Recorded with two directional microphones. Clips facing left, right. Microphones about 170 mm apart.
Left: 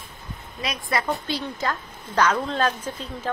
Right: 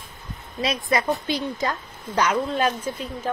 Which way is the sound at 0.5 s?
25° right (ahead or behind).